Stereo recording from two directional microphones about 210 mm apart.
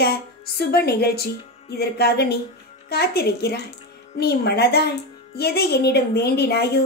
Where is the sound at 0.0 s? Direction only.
45° left (ahead or behind).